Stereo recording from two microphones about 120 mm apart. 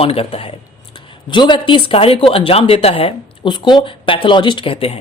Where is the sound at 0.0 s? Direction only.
55° left (ahead or behind).